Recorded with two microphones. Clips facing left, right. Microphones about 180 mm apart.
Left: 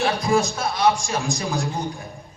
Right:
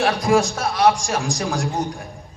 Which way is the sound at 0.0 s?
80° right.